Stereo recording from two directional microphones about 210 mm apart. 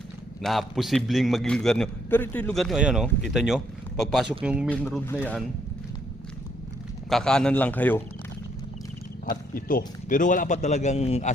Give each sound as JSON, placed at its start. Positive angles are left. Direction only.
{"t": 0.4, "sound": "a man's voice", "side_deg": 0}
{"t": 4.7, "sound": "a man's voice", "side_deg": 5}
{"t": 7.1, "sound": "a man's voice", "side_deg": 5}
{"t": 9.3, "sound": "speech", "side_deg": 40}